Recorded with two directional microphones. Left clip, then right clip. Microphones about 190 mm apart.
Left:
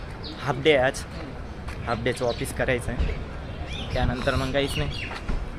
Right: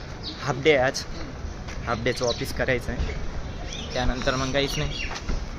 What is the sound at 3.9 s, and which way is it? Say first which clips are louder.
Speech: even; centre (ahead or behind).